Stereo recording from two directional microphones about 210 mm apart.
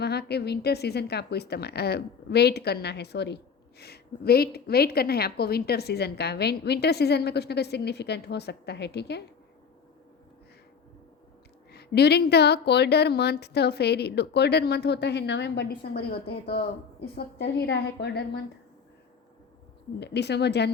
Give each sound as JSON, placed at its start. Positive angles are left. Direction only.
{"t": 0.0, "sound": "a woman's voice", "side_deg": 50}
{"t": 11.7, "sound": "a woman's voice", "side_deg": 50}
{"t": 20.0, "sound": "a woman's voice", "side_deg": 55}